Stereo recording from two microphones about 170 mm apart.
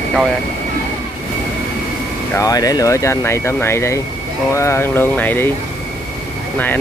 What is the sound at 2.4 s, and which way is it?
Speech, 20° left (ahead or behind).